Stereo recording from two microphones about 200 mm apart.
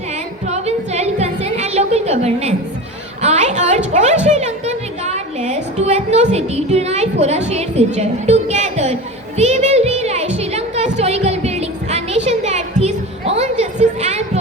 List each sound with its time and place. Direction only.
0.4 s music: 35° right (ahead or behind)
3.2 s a woman's voice: 35° right (ahead or behind)
9.4 s music: 35° right (ahead or behind)